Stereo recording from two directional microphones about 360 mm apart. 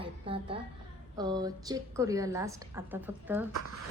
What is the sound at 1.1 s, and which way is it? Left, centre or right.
A woman's voice, centre.